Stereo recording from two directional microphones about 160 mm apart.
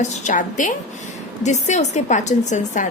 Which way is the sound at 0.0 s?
50° left (ahead or behind).